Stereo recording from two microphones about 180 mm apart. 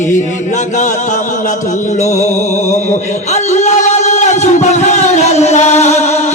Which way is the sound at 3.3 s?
40° left (ahead or behind).